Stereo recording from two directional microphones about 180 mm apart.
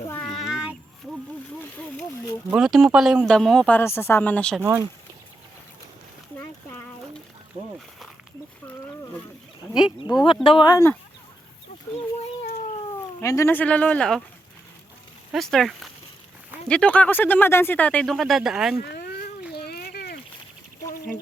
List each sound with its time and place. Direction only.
0.1 s child singing: 5° left (ahead or behind)
2.5 s speech: centre (ahead or behind)
4.6 s speech: 15° right (ahead or behind)
6.3 s a sound: 10° left (ahead or behind)
10.4 s speech: 25° left (ahead or behind)
13.2 s speech: 15° left (ahead or behind)
15.3 s speech: centre (ahead or behind)
18.9 s a sound: 60° left (ahead or behind)